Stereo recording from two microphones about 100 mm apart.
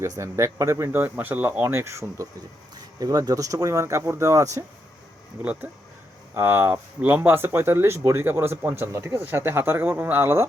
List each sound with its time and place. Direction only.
0.0 s speech: 30° right (ahead or behind)
6.3 s speech: 25° right (ahead or behind)